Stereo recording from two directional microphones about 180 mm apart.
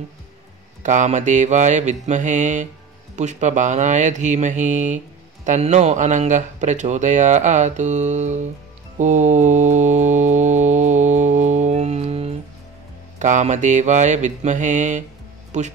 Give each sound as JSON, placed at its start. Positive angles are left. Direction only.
{"t": 0.8, "sound": "mantra", "side_deg": -40}
{"t": 3.2, "sound": "speech", "side_deg": -40}
{"t": 8.9, "sound": "mantra", "side_deg": -40}
{"t": 15.5, "sound": "speech", "side_deg": -40}